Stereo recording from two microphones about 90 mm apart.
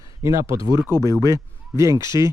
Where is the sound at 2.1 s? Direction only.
60° left (ahead or behind).